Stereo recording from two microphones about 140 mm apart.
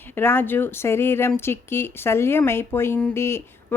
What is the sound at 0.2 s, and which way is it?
Speech, 15° left (ahead or behind).